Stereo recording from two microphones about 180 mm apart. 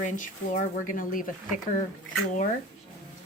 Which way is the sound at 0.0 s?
45° left (ahead or behind).